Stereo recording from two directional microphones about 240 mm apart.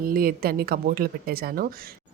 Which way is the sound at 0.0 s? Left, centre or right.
Right.